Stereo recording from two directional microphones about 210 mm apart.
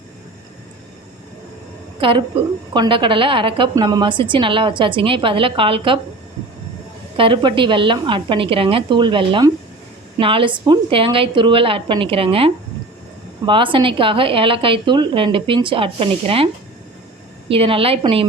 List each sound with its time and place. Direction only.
2.0 s a woman's voice: 25° right (ahead or behind)
7.2 s a woman's voice: 25° right (ahead or behind)
17.5 s a woman's voice: 25° right (ahead or behind)